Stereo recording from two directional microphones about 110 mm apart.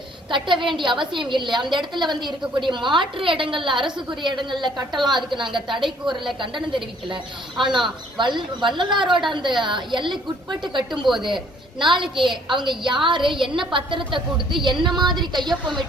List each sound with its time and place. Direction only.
0.3 s a woman's voice: 45° right (ahead or behind)
7.6 s a woman's voice: 45° right (ahead or behind)